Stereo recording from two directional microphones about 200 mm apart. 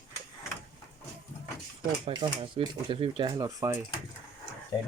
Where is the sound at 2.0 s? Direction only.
25° right (ahead or behind).